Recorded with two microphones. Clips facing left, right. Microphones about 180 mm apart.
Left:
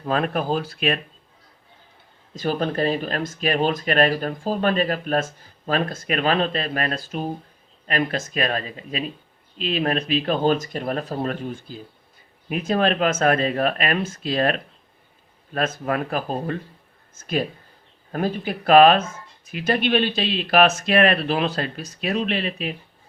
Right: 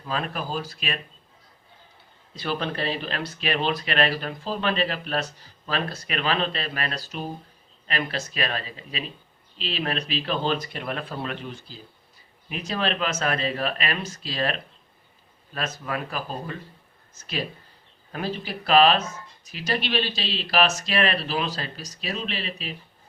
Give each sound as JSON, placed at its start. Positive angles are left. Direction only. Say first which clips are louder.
{"t": 0.0, "sound": "speech", "louder": "left 7 dB", "side_deg": 50}
{"t": 2.3, "sound": "speech", "louder": "left 5 dB", "side_deg": 45}